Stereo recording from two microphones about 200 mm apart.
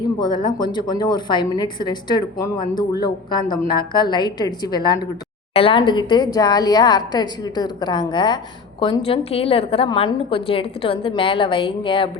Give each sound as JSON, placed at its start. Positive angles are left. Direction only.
{"t": 0.2, "sound": "a woman's voice", "side_deg": 20}